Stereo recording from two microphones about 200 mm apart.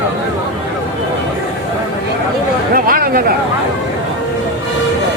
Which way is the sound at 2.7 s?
45° right (ahead or behind).